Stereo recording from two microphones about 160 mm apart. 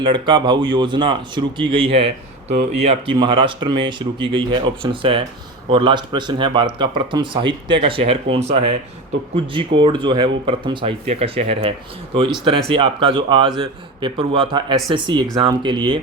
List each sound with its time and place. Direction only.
0.0 s speech: 30° right (ahead or behind)